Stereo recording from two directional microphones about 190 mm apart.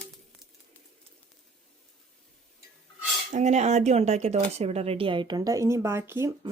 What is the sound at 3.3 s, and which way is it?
Speech, 35° right (ahead or behind).